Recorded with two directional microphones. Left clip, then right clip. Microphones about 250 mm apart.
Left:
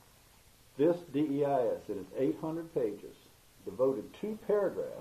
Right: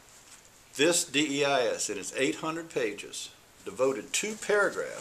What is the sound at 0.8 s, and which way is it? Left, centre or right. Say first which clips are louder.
Speech: right 4 dB; right.